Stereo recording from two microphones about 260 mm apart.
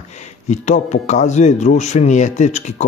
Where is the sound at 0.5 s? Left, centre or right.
Left.